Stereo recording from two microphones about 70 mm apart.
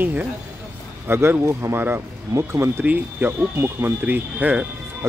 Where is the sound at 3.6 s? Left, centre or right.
Right.